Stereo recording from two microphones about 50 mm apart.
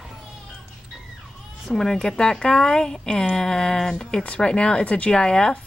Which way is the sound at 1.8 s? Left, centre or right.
Centre.